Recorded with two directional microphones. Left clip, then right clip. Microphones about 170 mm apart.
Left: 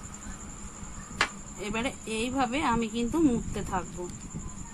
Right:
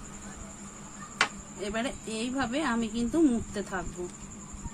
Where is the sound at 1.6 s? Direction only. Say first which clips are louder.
Even; 30° left (ahead or behind).